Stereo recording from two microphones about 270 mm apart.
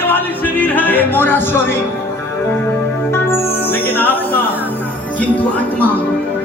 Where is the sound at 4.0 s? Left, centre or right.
Centre.